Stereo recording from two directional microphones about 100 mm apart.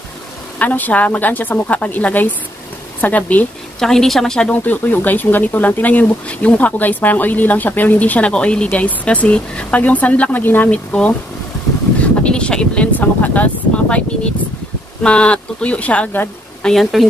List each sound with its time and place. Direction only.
0.6 s speech: 15° left (ahead or behind)
3.8 s speech: 5° left (ahead or behind)
12.2 s speech: 10° left (ahead or behind)
16.6 s speech: centre (ahead or behind)